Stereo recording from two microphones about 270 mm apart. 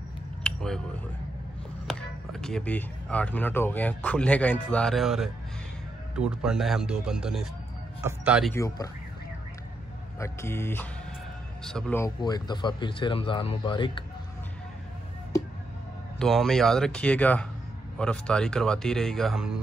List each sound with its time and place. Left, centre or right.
0.4 s a sound: centre
1.9 s speech: centre
8.5 s a man's voice: centre
10.1 s a man's voice: centre
16.2 s speech: centre